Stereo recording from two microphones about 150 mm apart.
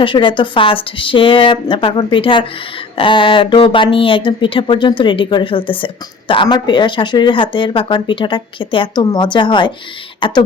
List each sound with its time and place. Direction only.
0.0 s speech: 35° left (ahead or behind)